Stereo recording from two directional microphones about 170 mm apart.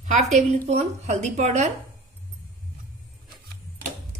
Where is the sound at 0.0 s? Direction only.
45° right (ahead or behind).